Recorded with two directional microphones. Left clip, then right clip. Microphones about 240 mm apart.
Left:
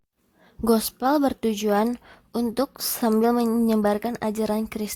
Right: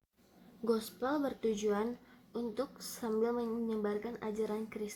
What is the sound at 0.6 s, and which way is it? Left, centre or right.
A woman's voice, left.